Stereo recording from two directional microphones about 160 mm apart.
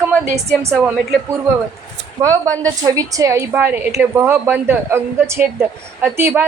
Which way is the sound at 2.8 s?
20° right (ahead or behind).